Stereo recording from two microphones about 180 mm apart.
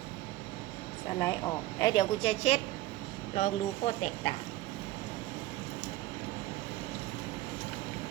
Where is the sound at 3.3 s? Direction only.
45° left (ahead or behind).